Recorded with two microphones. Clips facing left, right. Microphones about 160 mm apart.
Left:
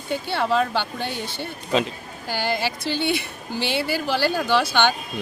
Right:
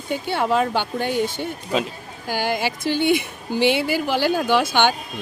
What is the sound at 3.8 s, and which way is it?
Speech, 15° right (ahead or behind).